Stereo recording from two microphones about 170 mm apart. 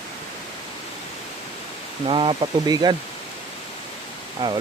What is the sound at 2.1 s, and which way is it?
Speech, 30° right (ahead or behind).